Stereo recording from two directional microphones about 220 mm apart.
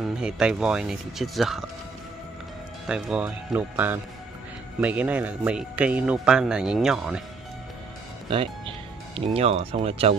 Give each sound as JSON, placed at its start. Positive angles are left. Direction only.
{"t": 0.0, "sound": "speech", "side_deg": -5}
{"t": 2.9, "sound": "speech", "side_deg": -5}
{"t": 8.3, "sound": "speech", "side_deg": -25}